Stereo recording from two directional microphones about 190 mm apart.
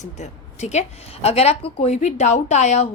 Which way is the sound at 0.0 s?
40° left (ahead or behind).